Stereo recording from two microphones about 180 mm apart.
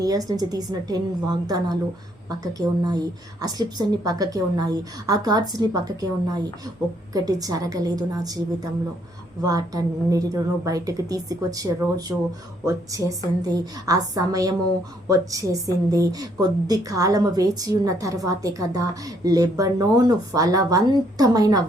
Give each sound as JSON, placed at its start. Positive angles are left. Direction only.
{"t": 0.0, "sound": "a woman's voice", "side_deg": -20}
{"t": 9.4, "sound": "a woman's voice", "side_deg": -20}